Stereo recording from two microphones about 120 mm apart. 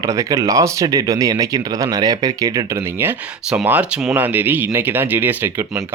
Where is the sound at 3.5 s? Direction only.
15° right (ahead or behind).